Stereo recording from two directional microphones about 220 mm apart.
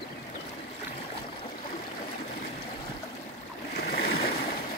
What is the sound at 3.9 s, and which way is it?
Boat, 45° left (ahead or behind).